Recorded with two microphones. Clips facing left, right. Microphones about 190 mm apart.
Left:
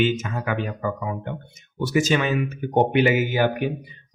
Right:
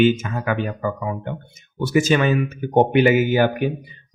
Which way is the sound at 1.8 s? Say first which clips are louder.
Right 3 dB; 50° right (ahead or behind).